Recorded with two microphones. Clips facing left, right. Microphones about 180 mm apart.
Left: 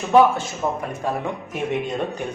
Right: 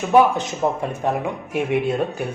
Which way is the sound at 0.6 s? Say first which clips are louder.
Right 3 dB; 25° right (ahead or behind).